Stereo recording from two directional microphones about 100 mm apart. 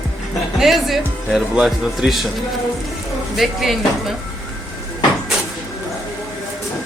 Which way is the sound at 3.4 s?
Centre (ahead or behind).